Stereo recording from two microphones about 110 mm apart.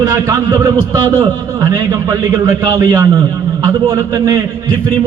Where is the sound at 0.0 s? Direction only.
30° right (ahead or behind).